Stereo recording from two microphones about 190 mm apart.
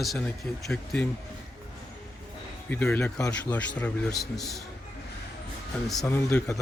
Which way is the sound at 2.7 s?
10° left (ahead or behind).